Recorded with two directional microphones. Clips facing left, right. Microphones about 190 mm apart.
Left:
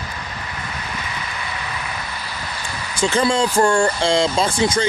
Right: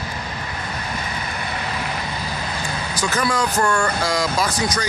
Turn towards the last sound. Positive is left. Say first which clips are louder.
# left 4 dB
turn(degrees=25)  # may be behind; listen again after turning